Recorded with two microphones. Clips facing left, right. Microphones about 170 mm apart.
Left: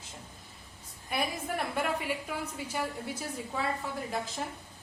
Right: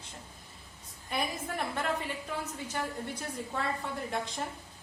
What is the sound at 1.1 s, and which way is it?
A woman's voice, 10° left (ahead or behind).